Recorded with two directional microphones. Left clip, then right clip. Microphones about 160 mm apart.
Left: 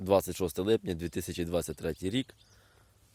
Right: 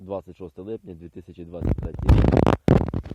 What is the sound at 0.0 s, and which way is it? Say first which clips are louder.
Speech: left 6 dB; 50° left (ahead or behind).